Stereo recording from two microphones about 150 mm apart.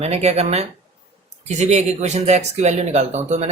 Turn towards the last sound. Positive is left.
turn(degrees=-50)  # may be behind; listen again after turning